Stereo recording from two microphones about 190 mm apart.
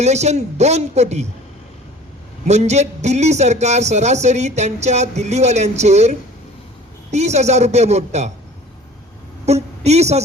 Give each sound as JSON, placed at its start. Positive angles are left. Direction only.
{"t": 0.0, "sound": "speech", "side_deg": -35}
{"t": 2.5, "sound": "speech", "side_deg": -35}
{"t": 9.5, "sound": "a woman's voice", "side_deg": -35}